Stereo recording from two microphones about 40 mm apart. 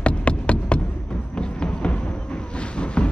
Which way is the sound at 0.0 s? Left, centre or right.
Left.